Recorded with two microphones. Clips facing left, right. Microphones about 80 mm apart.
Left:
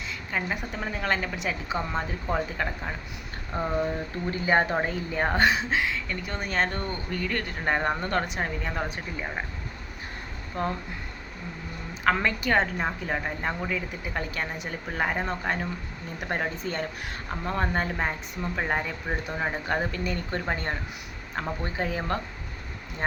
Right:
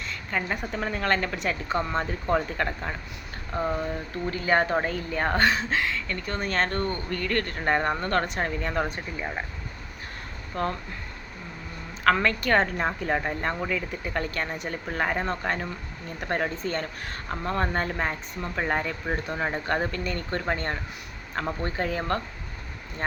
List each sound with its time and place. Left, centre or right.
0.1 s speech: centre
3.5 s speech: left; by 9.4 s centre
10.5 s speech: centre
12.0 s a woman's voice: centre